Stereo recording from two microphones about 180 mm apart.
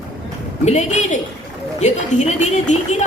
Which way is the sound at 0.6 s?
40° left (ahead or behind).